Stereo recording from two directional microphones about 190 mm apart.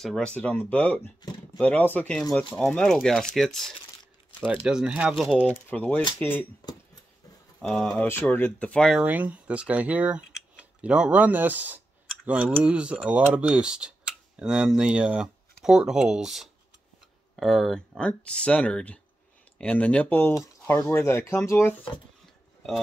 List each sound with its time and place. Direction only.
0.0 s speech: 5° left (ahead or behind)
5.7 s speech: 10° left (ahead or behind)
6.6 s speech: 20° left (ahead or behind)
7.6 s speech: 5° left (ahead or behind)
9.0 s speech: 10° right (ahead or behind); by 21.7 s 15° left (ahead or behind)